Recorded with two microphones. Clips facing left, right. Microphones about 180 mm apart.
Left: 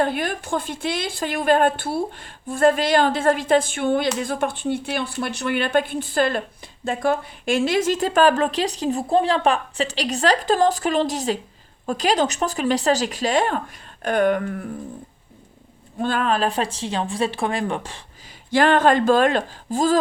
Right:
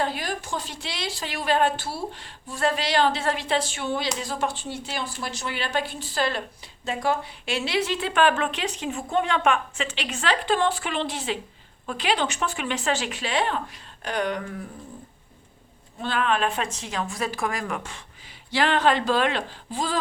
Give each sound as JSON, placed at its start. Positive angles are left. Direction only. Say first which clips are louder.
{"t": 0.0, "sound": "a woman's voice", "louder": "left 5 dB", "side_deg": 55}
{"t": 16.0, "sound": "speech", "louder": "left 3 dB", "side_deg": 45}
{"t": 18.5, "sound": "a woman's voice", "louder": "left 5 dB", "side_deg": 50}